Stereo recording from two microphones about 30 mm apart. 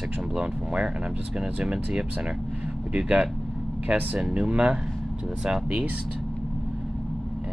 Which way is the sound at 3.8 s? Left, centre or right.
Right.